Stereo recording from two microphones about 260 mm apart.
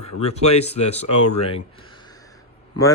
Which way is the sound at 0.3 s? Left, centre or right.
Left.